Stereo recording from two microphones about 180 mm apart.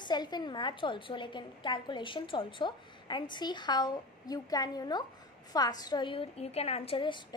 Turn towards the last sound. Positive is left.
turn(degrees=25)  # may be behind; listen again after turning